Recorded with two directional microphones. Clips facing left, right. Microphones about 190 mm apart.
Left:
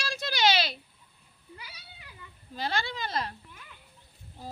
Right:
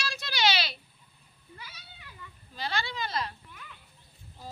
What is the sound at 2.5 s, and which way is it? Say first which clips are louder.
Speech: left 2 dB; 50° left (ahead or behind).